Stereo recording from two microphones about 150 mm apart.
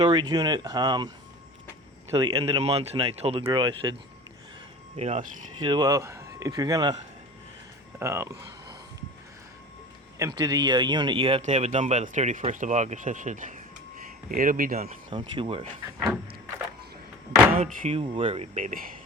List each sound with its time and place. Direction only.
0.0 s speech: 30° right (ahead or behind)
2.1 s speech: 35° right (ahead or behind)
4.9 s speech: 45° right (ahead or behind)
5.6 s speech: 25° right (ahead or behind)
7.9 s speech: 20° right (ahead or behind)
10.2 s speech: 25° right (ahead or behind); by 14.9 s 70° right (ahead or behind)
15.1 s speech: 40° right (ahead or behind)
17.6 s speech: 40° right (ahead or behind)
18.5 s speech: 65° right (ahead or behind)